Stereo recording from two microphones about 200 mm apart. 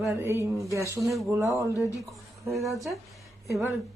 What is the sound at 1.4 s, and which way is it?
Speech, 15° right (ahead or behind).